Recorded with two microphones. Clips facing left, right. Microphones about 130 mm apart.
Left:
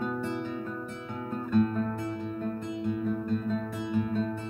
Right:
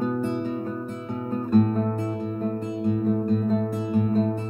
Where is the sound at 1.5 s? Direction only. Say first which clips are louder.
Right 5 dB; 40° right (ahead or behind).